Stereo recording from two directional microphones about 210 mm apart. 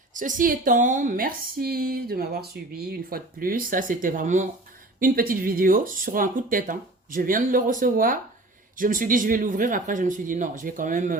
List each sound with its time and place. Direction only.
0.1 s speech: 40° right (ahead or behind)